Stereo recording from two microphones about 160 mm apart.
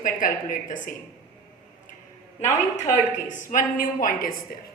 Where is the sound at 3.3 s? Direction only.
55° left (ahead or behind).